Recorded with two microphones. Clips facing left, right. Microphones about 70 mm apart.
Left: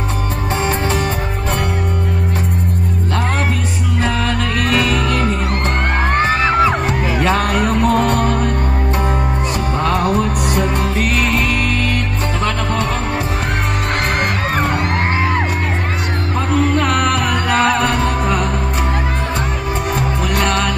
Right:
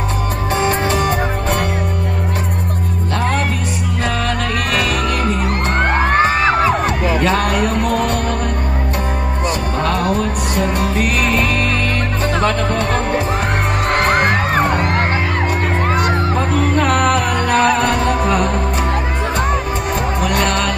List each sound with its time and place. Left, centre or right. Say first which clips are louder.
4.6 s music: left 3 dB; centre
7.2 s music: left 2 dB; centre
16.8 s music: right 2 dB; centre
17.5 s music: right 1 dB; left
17.8 s music: right 1 dB; centre
20.3 s music: left 1 dB; centre